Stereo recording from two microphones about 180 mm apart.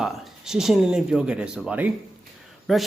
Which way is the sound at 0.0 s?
5° right (ahead or behind).